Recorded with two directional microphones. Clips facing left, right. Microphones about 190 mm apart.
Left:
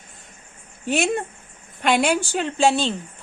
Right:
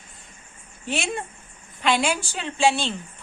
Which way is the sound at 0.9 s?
45° left (ahead or behind).